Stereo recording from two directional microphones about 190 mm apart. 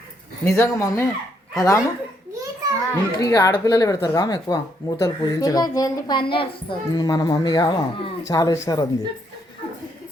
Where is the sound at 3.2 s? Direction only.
15° left (ahead or behind).